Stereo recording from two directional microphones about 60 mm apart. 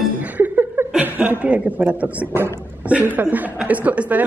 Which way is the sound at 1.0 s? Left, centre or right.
Right.